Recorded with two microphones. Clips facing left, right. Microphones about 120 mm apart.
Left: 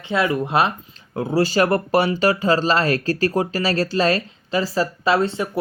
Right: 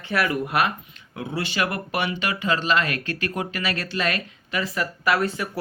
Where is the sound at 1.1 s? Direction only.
40° left (ahead or behind).